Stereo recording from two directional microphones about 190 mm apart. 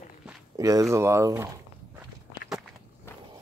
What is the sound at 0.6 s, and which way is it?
Speech, 15° right (ahead or behind).